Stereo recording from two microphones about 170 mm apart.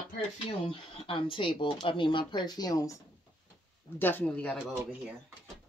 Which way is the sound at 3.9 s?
10° left (ahead or behind).